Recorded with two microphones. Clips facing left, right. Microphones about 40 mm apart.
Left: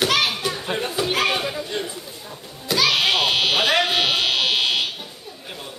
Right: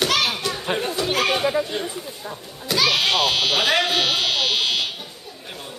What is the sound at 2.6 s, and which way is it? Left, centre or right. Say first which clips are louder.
Buzzer: left 1 dB; centre.